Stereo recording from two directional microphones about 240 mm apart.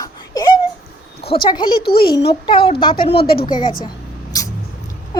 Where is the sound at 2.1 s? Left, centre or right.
Left.